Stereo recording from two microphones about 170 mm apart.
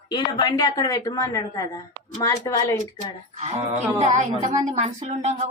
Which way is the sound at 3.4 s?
40° right (ahead or behind).